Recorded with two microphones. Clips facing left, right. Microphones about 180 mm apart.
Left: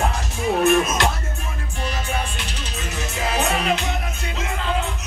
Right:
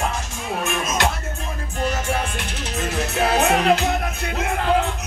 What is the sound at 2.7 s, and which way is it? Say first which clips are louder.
Music: right 7 dB; 70° right (ahead or behind).